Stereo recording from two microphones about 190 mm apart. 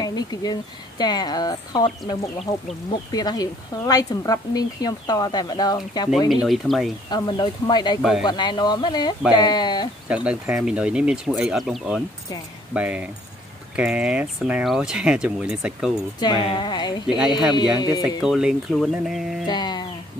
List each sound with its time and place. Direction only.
0.0 s speech: 20° left (ahead or behind)
2.9 s speech: 20° left (ahead or behind)
6.4 s speech: centre (ahead or behind)
7.1 s speech: 25° left (ahead or behind)
8.0 s speech: centre (ahead or behind)
8.3 s speech: 20° left (ahead or behind)
10.0 s speech: 5° right (ahead or behind)
16.2 s speech: 25° left (ahead or behind)
17.2 s speech: 5° right (ahead or behind)
17.7 s speech: 20° left (ahead or behind)
18.0 s speech: 5° right (ahead or behind)
19.4 s a sound: 20° left (ahead or behind)